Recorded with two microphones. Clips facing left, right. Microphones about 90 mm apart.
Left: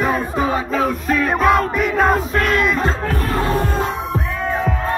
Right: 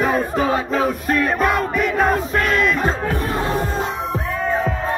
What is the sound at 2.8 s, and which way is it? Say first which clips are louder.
Music: even; 15° right (ahead or behind).